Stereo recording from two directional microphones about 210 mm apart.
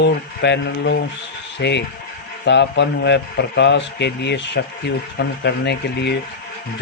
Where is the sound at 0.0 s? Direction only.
55° left (ahead or behind).